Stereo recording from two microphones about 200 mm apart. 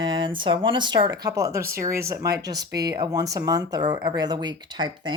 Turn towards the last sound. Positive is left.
turn(degrees=-20)  # may be behind; listen again after turning